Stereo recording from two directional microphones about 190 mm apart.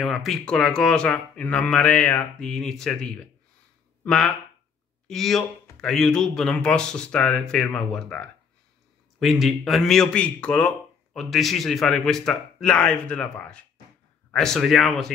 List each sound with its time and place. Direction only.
0.0 s speech: centre (ahead or behind)